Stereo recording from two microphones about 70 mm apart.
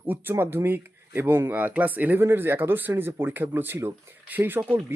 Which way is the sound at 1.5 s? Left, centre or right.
Right.